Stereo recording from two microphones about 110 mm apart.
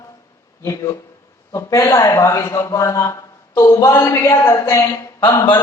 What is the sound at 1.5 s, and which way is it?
A man's voice, 30° left (ahead or behind).